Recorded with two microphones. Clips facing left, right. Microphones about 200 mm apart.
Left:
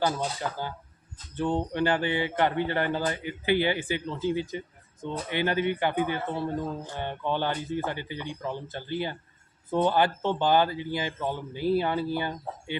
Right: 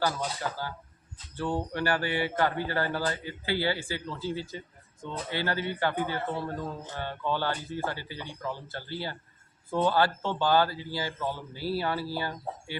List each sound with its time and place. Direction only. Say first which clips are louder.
0.0 s speech: left 2 dB; 20° left (ahead or behind)